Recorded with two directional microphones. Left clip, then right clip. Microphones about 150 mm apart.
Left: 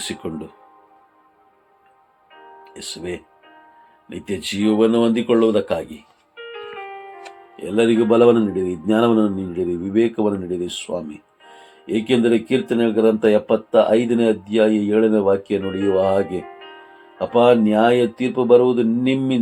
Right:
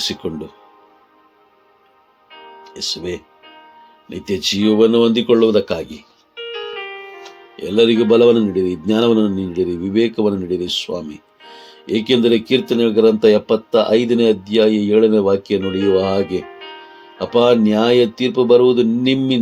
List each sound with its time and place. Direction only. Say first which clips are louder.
0.0 s speech: right 6 dB; 45° right (ahead or behind)
2.3 s music: right 4 dB; 30° right (ahead or behind)
2.7 s speech: right 6 dB; 45° right (ahead or behind)
3.4 s music: right 5 dB; 30° right (ahead or behind)
4.1 s speech: right 6 dB; 45° right (ahead or behind)
6.3 s music: right 6 dB; 30° right (ahead or behind)
7.5 s speech: right 4 dB; 45° right (ahead or behind)